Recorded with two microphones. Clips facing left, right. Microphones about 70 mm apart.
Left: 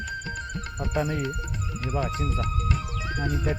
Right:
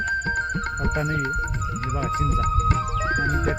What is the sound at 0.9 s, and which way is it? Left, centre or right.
Speech, right.